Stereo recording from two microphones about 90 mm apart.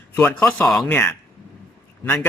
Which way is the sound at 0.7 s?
10° left (ahead or behind).